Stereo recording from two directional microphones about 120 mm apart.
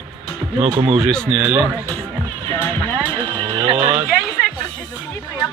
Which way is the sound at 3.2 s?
45° right (ahead or behind).